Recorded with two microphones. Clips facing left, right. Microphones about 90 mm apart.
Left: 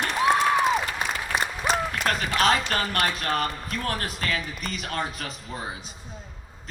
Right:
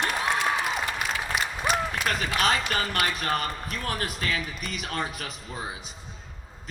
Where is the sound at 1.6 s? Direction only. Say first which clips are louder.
Left 1 dB; 40° left (ahead or behind).